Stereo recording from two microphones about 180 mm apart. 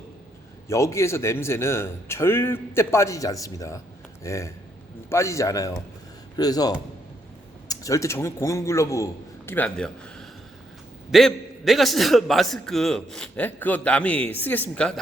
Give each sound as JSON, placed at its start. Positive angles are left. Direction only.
{"t": 0.7, "sound": "a man's voice", "side_deg": 15}